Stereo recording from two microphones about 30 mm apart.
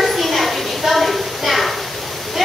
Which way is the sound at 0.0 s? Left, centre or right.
Centre.